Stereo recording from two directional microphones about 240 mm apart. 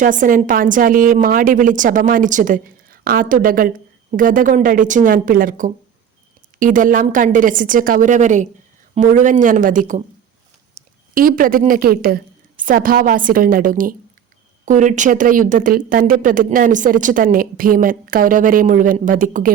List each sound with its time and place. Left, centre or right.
0.0 s speech: right